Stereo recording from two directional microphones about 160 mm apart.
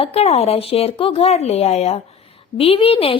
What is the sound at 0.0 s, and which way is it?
A woman's voice, 40° left (ahead or behind).